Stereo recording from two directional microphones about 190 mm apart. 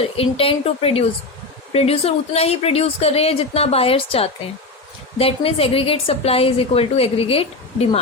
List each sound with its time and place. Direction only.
0.0 s a woman's voice: 30° left (ahead or behind)